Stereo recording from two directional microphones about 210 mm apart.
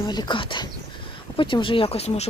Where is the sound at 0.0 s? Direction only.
20° left (ahead or behind).